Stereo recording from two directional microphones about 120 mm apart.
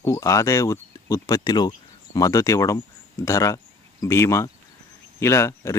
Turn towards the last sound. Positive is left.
turn(degrees=25)  # may be behind; listen again after turning